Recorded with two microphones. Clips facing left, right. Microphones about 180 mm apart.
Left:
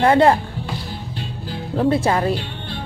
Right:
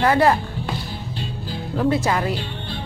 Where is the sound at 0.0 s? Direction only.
30° left (ahead or behind).